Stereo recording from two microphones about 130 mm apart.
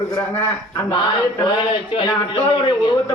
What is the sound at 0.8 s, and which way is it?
Speech, 40° left (ahead or behind).